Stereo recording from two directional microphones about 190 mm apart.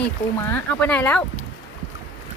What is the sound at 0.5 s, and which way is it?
Speech, 5° left (ahead or behind).